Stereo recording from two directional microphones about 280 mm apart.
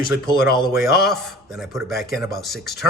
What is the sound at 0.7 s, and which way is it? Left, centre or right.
A man's voice, centre.